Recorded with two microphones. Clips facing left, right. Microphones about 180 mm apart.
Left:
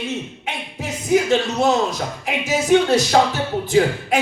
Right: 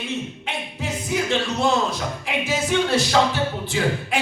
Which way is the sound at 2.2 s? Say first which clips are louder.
Left 4 dB; 40° left (ahead or behind).